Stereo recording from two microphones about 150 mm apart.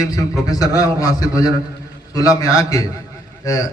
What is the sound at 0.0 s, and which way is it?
A man's voice, 25° left (ahead or behind).